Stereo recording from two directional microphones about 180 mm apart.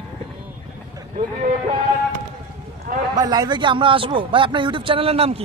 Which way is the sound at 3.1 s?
20° right (ahead or behind).